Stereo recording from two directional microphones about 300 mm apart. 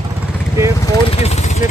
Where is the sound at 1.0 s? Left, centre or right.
Centre.